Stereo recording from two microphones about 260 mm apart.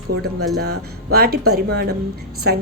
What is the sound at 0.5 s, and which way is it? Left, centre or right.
A woman's voice, right.